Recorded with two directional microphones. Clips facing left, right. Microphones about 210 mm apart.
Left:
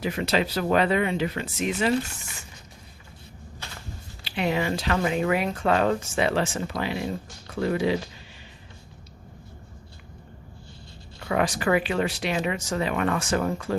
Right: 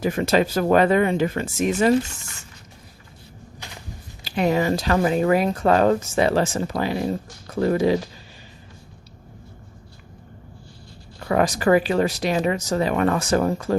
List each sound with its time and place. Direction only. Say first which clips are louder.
0.0 s speech: right 5 dB; 45° right (ahead or behind)
3.6 s a sound: right 1 dB; 15° right (ahead or behind)
4.2 s speech: right 5 dB; 40° right (ahead or behind)
11.3 s speech: right 5 dB; 40° right (ahead or behind)